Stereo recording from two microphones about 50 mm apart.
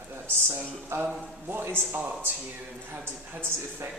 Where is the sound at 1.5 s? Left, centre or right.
Right.